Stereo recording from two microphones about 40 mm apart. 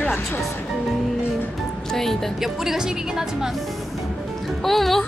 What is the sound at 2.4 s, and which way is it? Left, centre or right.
Speech, centre.